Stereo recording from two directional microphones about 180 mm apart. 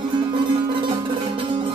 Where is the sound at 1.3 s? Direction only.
30° right (ahead or behind).